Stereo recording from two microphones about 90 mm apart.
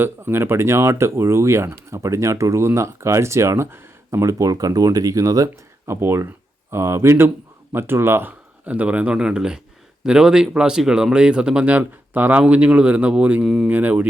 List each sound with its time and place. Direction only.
0.0 s speech: 25° right (ahead or behind)
6.0 s speech: 25° right (ahead or behind)